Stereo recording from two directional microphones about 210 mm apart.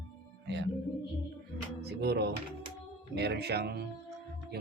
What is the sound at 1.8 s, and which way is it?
Speech, 50° right (ahead or behind).